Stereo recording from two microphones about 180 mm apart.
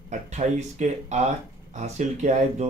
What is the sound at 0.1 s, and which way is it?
Speech, 40° right (ahead or behind).